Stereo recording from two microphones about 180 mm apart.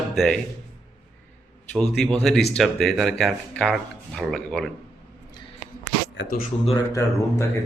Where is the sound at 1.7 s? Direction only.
5° left (ahead or behind).